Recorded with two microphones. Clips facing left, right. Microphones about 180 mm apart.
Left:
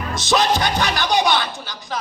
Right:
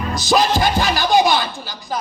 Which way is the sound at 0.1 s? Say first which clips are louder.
Right 2 dB; centre (ahead or behind).